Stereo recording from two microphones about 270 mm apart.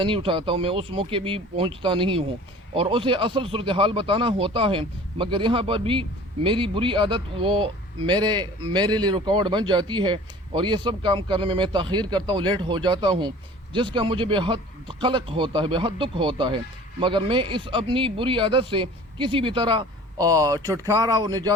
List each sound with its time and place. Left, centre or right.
0.0 s speech: centre